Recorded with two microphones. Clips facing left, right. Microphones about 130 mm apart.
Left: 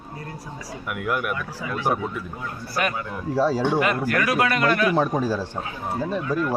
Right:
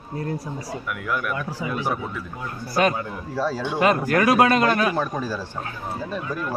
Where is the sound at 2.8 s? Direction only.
25° right (ahead or behind).